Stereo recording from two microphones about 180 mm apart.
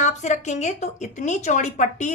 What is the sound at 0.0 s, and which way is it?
A woman's voice, 40° left (ahead or behind).